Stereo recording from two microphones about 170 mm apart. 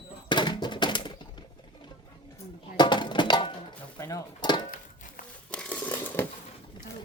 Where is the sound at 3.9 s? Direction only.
20° left (ahead or behind).